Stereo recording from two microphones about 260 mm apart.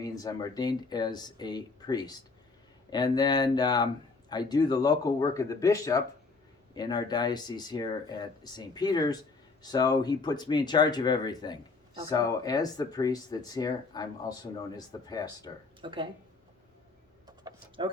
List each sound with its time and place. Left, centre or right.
0.0 s speech: centre
15.8 s speech: centre
17.2 s a sound: centre